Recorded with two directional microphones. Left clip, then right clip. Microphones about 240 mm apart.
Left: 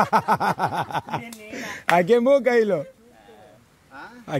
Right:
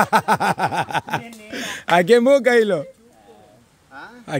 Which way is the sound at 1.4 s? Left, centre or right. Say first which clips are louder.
Right 4 dB; centre.